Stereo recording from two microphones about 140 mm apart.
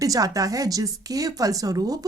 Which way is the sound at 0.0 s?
25° right (ahead or behind).